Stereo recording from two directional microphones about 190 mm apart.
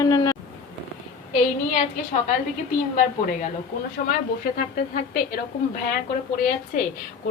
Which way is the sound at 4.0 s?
50° left (ahead or behind).